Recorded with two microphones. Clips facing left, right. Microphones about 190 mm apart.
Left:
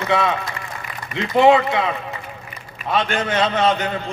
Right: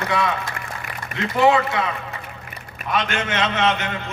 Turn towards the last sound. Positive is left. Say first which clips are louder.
# left 3 dB
turn(degrees=35)  # may be behind; listen again after turning